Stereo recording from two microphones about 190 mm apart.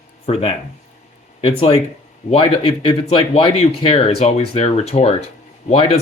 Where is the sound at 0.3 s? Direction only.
30° left (ahead or behind).